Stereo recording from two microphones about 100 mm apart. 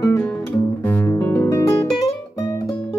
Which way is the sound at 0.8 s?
25° left (ahead or behind).